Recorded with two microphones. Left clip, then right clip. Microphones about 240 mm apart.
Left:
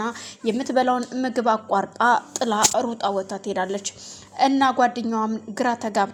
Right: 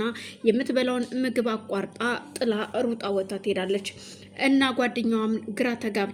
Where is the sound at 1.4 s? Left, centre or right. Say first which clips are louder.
Left 9 dB; left.